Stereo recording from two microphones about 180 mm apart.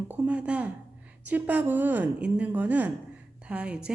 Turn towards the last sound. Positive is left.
turn(degrees=-5)  # may be behind; listen again after turning